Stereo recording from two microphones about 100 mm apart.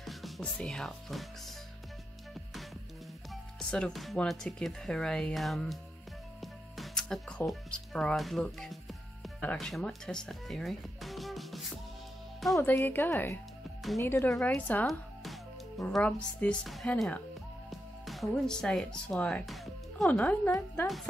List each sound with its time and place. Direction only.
0.0 s music: centre (ahead or behind)
0.4 s speech: 10° left (ahead or behind)
3.5 s speech: 5° left (ahead or behind)
12.7 s a woman's voice: 20° left (ahead or behind)
16.0 s speech: 10° left (ahead or behind)
19.4 s music: centre (ahead or behind)
20.1 s speech: 15° left (ahead or behind)
20.8 s speech: centre (ahead or behind)